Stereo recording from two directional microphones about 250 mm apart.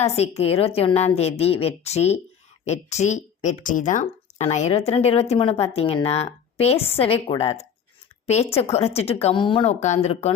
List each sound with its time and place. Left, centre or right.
0.0 s speech: left